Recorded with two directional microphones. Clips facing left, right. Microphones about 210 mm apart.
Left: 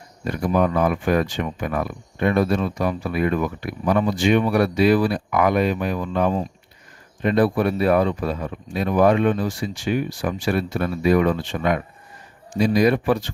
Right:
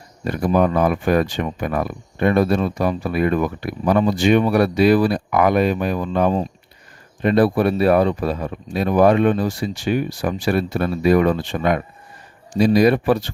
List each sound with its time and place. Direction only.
0.3 s speech: 35° right (ahead or behind)